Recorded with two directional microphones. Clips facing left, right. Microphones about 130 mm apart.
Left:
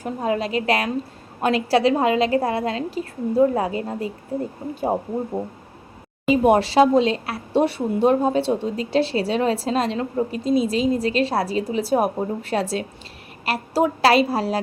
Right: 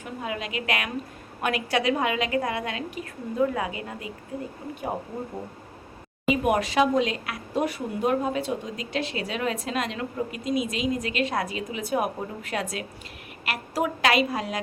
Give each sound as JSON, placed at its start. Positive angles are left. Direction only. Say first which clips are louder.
{"t": 0.0, "sound": "speech", "louder": "left 9 dB", "side_deg": 35}
{"t": 6.2, "sound": "speech", "louder": "left 7 dB", "side_deg": 30}